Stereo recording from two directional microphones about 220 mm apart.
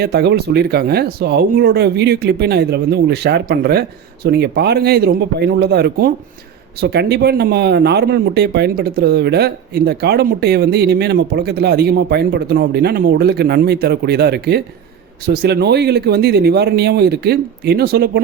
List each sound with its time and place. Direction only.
0.0 s speech: 50° right (ahead or behind)